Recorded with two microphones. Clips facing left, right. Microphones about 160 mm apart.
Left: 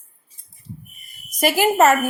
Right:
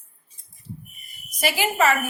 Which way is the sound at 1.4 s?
45° left (ahead or behind).